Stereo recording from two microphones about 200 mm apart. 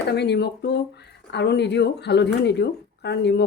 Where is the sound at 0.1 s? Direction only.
55° left (ahead or behind).